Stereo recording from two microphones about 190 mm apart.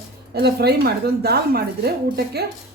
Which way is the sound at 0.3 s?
60° right (ahead or behind).